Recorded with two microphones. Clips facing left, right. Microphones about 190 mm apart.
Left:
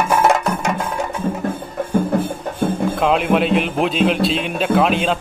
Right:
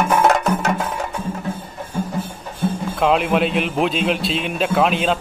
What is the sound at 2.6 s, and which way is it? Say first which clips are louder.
Music: left 2 dB; 55° left (ahead or behind).